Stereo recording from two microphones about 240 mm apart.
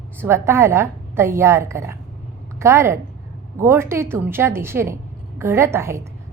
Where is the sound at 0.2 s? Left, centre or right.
Centre.